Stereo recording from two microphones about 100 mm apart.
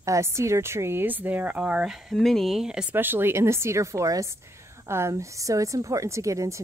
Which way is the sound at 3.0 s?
20° right (ahead or behind).